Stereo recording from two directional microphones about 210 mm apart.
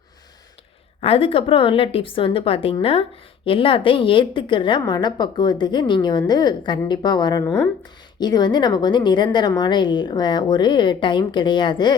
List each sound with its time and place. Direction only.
1.0 s a woman's voice: 25° left (ahead or behind)
7.5 s speech: 5° left (ahead or behind)
8.2 s a woman's voice: 20° left (ahead or behind)